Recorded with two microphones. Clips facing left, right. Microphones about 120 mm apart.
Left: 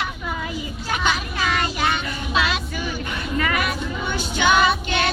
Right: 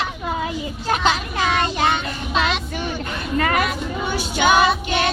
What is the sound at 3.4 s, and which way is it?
Chatter, 40° right (ahead or behind).